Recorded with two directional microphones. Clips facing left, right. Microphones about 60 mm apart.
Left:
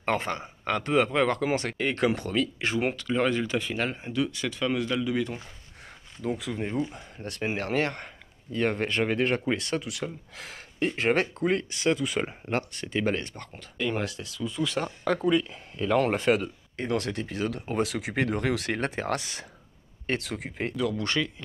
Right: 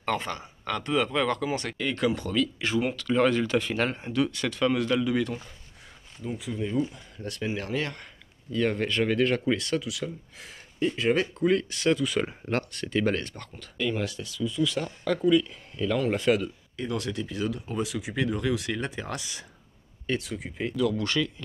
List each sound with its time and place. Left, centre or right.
0.0 s speech: left
3.1 s speech: centre
6.2 s speech: left
6.8 s speech: left
10.3 s speech: left
10.9 s speech: left
11.4 s speech: left
15.4 s speech: left
16.1 s speech: left
17.6 s speech: left
20.1 s speech: left
20.7 s speech: left